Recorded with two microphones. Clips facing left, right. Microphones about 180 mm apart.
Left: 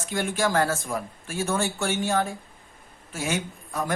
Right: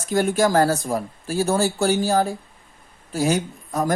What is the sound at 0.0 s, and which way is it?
Speech, 40° right (ahead or behind).